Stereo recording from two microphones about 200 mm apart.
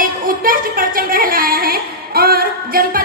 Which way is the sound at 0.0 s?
45° right (ahead or behind).